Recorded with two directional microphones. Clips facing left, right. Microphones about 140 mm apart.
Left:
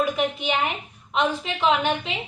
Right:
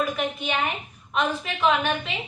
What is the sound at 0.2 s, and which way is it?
A woman's voice, 20° left (ahead or behind).